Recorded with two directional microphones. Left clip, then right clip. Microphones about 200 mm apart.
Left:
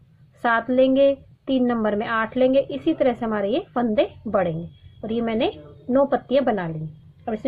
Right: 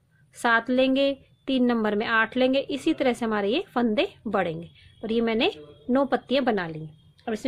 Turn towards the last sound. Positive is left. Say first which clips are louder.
# left 3 dB
turn(degrees=-55)  # may be behind; listen again after turning